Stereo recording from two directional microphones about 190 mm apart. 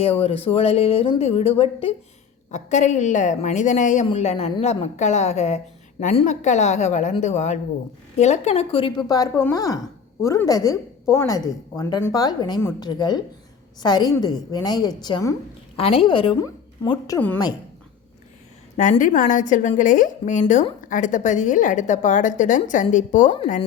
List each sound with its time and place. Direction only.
0.0 s a woman's voice: 30° left (ahead or behind)
15.8 s a woman's voice: 30° left (ahead or behind)
18.8 s a woman's voice: 45° left (ahead or behind)